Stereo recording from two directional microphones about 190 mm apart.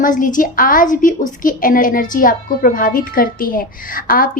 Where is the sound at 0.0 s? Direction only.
45° left (ahead or behind).